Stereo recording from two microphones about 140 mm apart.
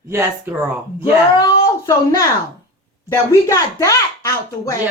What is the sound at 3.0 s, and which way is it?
Speech, 25° left (ahead or behind).